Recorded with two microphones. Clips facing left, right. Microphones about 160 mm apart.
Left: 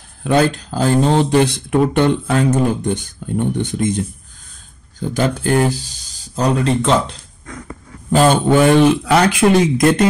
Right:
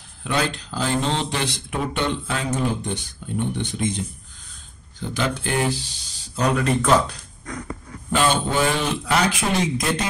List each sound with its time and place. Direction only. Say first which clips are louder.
0.2 s speech: left 9 dB; 45° left (ahead or behind)
5.1 s speech: left 8 dB; 45° left (ahead or behind)
6.3 s speech: left 4 dB; 30° left (ahead or behind)
8.1 s a man's voice: left 7 dB; 40° left (ahead or behind)
8.5 s speech: left 11 dB; 60° left (ahead or behind)